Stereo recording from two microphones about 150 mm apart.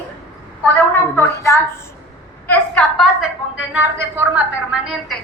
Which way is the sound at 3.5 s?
10° right (ahead or behind).